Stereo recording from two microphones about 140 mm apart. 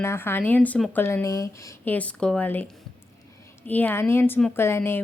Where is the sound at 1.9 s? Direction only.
10° left (ahead or behind).